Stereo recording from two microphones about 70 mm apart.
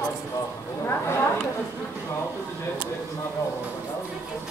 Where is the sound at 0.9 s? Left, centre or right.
Left.